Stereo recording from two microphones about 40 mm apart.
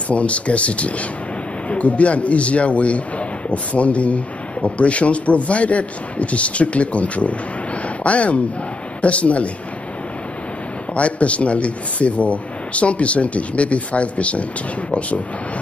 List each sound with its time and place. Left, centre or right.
0.1 s a man's voice: left
11.0 s a man's voice: left